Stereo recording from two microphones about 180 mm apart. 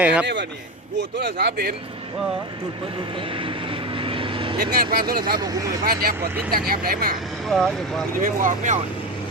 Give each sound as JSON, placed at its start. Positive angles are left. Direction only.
{"t": 0.0, "sound": "a man's voice", "side_deg": -5}
{"t": 1.2, "sound": "speech", "side_deg": -60}
{"t": 3.3, "sound": "vehicle", "side_deg": -30}
{"t": 4.7, "sound": "speech", "side_deg": -55}
{"t": 5.4, "sound": "speech", "side_deg": -20}
{"t": 5.8, "sound": "speech", "side_deg": -55}
{"t": 7.4, "sound": "speech", "side_deg": 0}
{"t": 8.2, "sound": "speech", "side_deg": -45}